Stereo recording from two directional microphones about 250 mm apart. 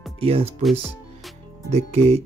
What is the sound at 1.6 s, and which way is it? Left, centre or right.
Speech, right.